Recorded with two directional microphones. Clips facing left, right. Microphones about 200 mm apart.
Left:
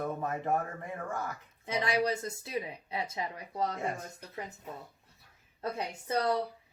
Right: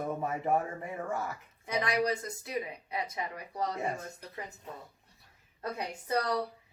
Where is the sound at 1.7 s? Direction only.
30° left (ahead or behind).